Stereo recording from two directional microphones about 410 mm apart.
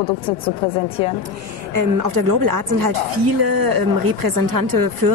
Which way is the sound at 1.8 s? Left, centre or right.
Right.